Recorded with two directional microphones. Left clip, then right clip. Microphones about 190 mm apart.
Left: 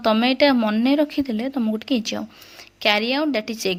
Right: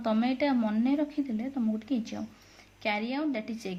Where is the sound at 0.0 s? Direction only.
45° left (ahead or behind).